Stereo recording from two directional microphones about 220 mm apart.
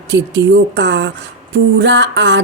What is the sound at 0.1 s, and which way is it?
A woman's voice, 55° right (ahead or behind).